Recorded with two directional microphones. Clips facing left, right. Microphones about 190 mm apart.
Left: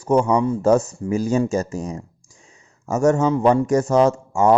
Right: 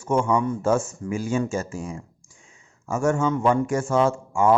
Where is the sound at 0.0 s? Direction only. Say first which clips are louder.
Left 4 dB; 40° left (ahead or behind).